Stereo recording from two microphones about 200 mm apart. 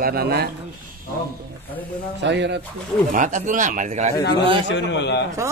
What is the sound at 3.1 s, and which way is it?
Speech, 40° right (ahead or behind).